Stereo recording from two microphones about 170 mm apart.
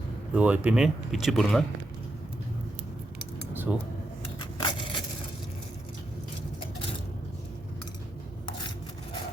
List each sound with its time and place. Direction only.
0.3 s speech: 10° right (ahead or behind)
3.5 s cutlery: 10° right (ahead or behind)
4.5 s a sound: 30° left (ahead or behind)